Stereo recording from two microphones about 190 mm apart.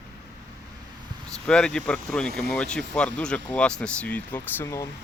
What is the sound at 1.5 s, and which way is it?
Speech, 5° left (ahead or behind).